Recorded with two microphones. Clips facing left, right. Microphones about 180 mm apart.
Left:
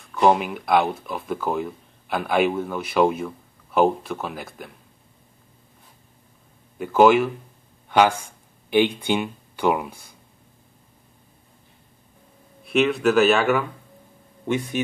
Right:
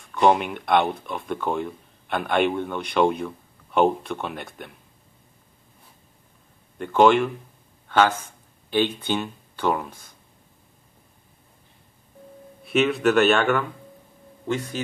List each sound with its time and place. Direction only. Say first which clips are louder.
0.1 s speech: left 1 dB; centre (ahead or behind)
6.8 s speech: left 2 dB; 5° left (ahead or behind)
12.6 s speech: left 1 dB; centre (ahead or behind)